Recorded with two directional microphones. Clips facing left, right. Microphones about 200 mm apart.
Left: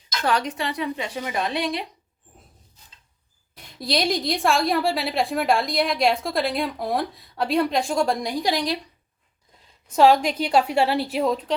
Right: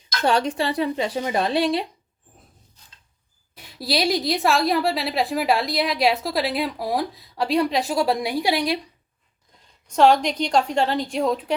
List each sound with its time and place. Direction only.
0.2 s speech: 30° right (ahead or behind)
3.5 s a woman's voice: 5° right (ahead or behind)
9.8 s a woman's voice: 5° left (ahead or behind)